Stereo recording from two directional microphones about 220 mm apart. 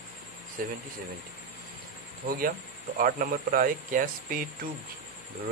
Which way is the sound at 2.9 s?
40° right (ahead or behind).